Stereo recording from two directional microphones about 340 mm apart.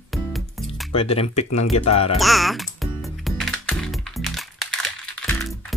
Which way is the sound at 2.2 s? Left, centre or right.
Centre.